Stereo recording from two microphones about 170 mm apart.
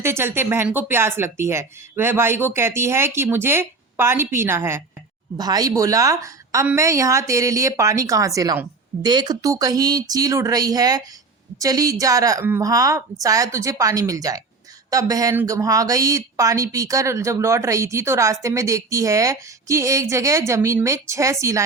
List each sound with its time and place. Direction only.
0.0 s a woman's voice: 15° right (ahead or behind)